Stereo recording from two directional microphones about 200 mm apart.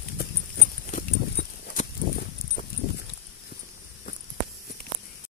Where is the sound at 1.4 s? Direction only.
50° left (ahead or behind).